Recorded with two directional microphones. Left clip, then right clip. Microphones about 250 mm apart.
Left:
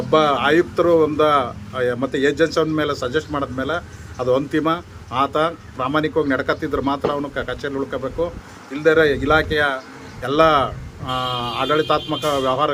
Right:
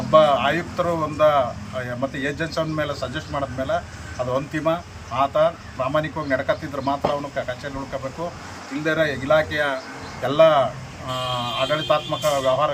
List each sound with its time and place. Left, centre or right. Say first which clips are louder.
0.1 s speech: even; left
8.8 s speech: left 7 dB; centre